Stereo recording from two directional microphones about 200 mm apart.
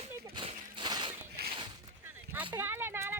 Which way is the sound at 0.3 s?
25° right (ahead or behind).